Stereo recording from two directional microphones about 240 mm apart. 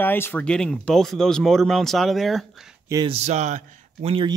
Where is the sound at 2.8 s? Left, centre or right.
Centre.